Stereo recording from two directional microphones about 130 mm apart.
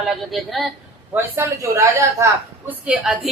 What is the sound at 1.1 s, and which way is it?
Speech, 20° right (ahead or behind).